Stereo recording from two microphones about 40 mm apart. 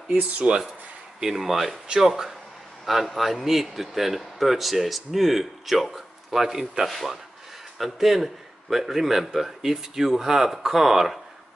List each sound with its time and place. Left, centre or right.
0.1 s speech: right
1.2 s a man's voice: centre